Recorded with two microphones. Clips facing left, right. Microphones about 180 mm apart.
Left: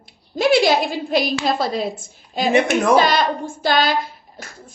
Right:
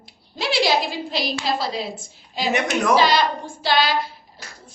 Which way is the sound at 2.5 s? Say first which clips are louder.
Left 5 dB; 30° left (ahead or behind).